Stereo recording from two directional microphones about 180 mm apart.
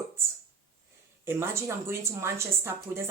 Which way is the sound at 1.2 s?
15° right (ahead or behind).